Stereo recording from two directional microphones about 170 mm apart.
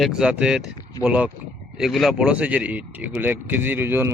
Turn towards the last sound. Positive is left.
turn(degrees=-10)  # may be behind; listen again after turning